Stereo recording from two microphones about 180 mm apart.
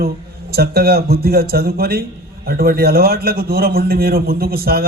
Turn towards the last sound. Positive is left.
turn(degrees=-60)  # may be behind; listen again after turning